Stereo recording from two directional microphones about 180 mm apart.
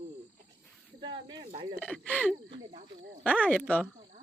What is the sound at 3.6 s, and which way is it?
Speech, 10° left (ahead or behind).